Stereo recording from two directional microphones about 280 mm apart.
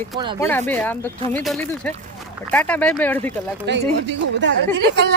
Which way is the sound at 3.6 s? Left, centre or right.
Right.